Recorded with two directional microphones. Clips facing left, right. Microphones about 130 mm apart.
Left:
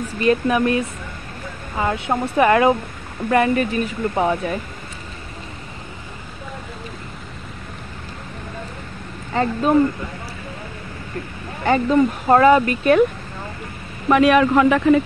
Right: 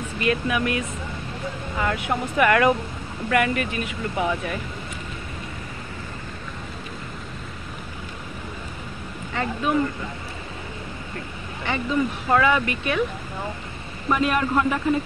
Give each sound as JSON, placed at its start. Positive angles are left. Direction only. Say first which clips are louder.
{"t": 0.2, "sound": "speech", "louder": "left 6 dB", "side_deg": 35}
{"t": 9.3, "sound": "speech", "louder": "left 6 dB", "side_deg": 35}
{"t": 11.6, "sound": "speech", "louder": "left 8 dB", "side_deg": 45}
{"t": 14.0, "sound": "a man's voice", "louder": "left 8 dB", "side_deg": 85}